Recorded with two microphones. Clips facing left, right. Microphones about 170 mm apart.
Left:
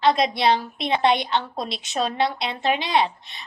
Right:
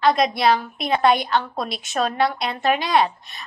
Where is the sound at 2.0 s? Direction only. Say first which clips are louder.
Right 2 dB; 50° right (ahead or behind).